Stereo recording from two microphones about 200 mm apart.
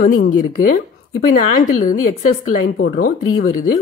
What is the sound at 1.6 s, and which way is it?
Speech, 40° left (ahead or behind).